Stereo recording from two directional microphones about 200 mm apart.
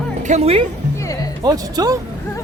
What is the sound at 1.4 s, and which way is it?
Speech, 20° right (ahead or behind).